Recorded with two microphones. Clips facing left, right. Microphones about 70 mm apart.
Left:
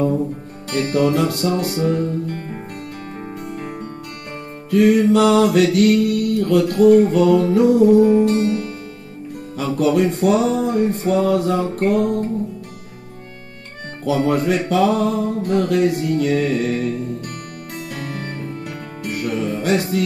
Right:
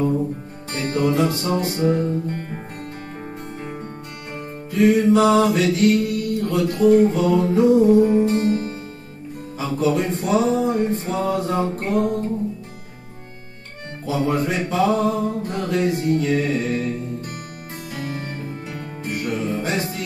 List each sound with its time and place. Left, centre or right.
0.7 s music: left
3.4 s music: left
14.0 s music: left
17.9 s music: left